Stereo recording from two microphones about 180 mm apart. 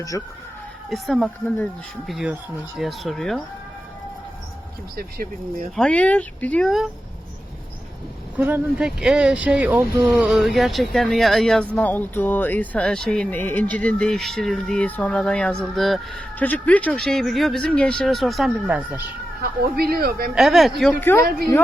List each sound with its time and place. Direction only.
0.1 s speech: 15° left (ahead or behind)
0.9 s speech: centre (ahead or behind)
4.9 s speech: 55° right (ahead or behind)
5.7 s speech: 5° left (ahead or behind)
8.4 s speech: 10° right (ahead or behind)
19.4 s speech: 60° right (ahead or behind)
20.3 s speech: centre (ahead or behind)
21.2 s speech: 60° right (ahead or behind)